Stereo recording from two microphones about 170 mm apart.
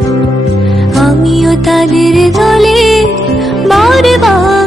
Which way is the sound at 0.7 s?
Centre (ahead or behind).